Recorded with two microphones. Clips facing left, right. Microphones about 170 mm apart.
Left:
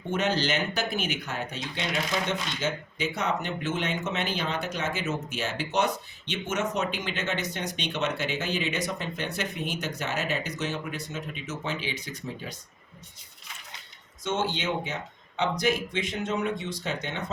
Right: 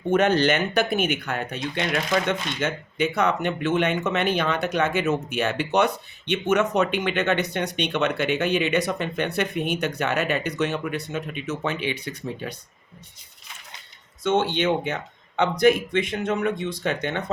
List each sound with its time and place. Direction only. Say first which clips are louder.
0.1 s speech: right 7 dB; 55° right (ahead or behind)
14.3 s speech: right 7 dB; 60° right (ahead or behind)